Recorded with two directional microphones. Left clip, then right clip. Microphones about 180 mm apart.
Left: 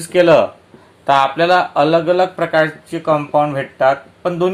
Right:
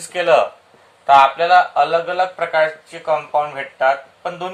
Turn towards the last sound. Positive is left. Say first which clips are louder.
# left 8 dB
turn(degrees=55)  # may be behind; listen again after turning